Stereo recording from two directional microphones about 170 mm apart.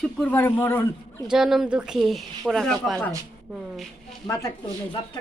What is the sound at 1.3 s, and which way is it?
Speech, 5° right (ahead or behind).